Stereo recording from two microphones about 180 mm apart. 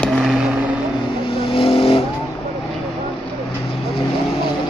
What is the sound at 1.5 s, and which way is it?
Vehicle, 30° left (ahead or behind).